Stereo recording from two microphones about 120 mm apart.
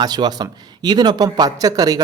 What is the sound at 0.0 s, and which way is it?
A man's voice, 35° right (ahead or behind).